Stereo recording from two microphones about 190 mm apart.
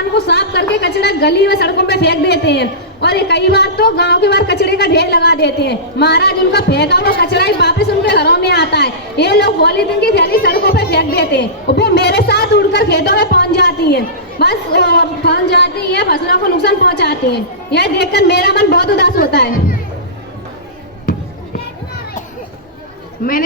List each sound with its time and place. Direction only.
0.1 s a woman's voice: 60° left (ahead or behind)